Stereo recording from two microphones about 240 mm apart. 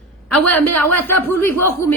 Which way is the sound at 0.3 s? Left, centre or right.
Centre.